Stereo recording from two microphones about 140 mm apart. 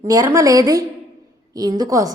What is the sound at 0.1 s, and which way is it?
A woman's voice, 25° right (ahead or behind).